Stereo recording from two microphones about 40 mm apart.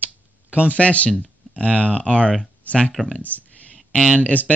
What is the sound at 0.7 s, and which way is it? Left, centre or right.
Speech, left.